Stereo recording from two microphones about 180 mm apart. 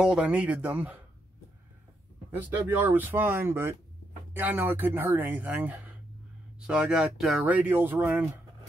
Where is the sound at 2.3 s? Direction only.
10° right (ahead or behind).